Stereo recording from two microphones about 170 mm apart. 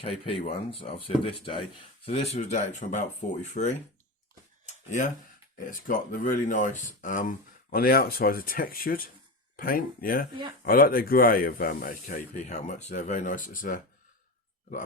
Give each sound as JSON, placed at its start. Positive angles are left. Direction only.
{"t": 0.0, "sound": "speech", "side_deg": 35}
{"t": 4.6, "sound": "a sound", "side_deg": 45}
{"t": 5.5, "sound": "speech", "side_deg": 55}